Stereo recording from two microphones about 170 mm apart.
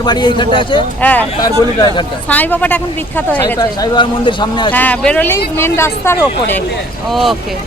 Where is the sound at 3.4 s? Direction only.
25° left (ahead or behind).